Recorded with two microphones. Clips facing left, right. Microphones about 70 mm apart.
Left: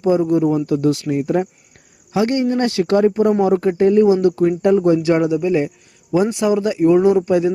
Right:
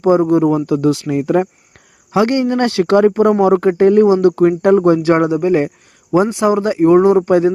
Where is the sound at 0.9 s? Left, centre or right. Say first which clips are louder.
Right 3 dB; right.